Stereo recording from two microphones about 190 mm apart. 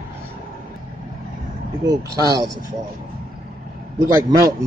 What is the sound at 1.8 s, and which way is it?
Speech, 20° right (ahead or behind).